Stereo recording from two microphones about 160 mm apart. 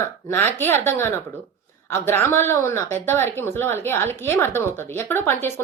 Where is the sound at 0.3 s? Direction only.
15° left (ahead or behind).